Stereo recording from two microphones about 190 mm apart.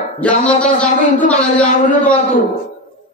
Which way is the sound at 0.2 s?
5° left (ahead or behind).